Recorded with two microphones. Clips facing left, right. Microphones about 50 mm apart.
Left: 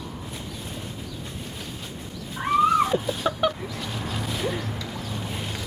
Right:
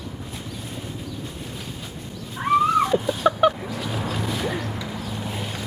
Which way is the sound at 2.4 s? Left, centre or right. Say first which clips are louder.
Right 1 dB; centre.